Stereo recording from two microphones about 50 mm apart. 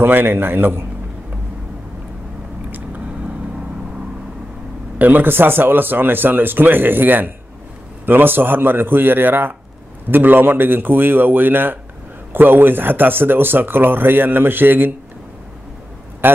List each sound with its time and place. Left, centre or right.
0.0 s speech: right
4.9 s speech: right